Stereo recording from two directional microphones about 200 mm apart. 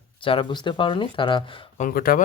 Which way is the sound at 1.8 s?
45° left (ahead or behind).